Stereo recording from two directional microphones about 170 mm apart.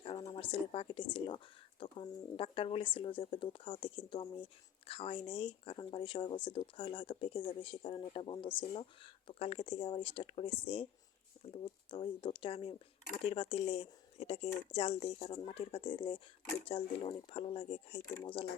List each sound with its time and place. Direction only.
0.0 s speech: 30° left (ahead or behind)